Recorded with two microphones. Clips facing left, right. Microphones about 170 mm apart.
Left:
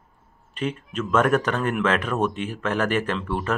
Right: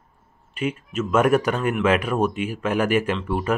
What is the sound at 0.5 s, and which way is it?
Speech, 10° right (ahead or behind).